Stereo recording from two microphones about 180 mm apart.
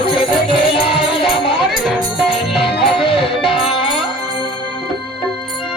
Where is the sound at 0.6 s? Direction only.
30° left (ahead or behind).